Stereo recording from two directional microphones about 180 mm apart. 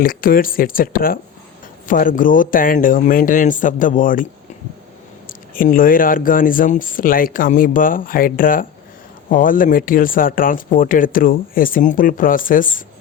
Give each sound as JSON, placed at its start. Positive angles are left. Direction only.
{"t": 0.0, "sound": "speech", "side_deg": 50}
{"t": 5.5, "sound": "speech", "side_deg": 50}